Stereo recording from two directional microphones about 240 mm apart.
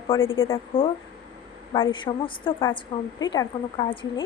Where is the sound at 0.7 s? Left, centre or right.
Left.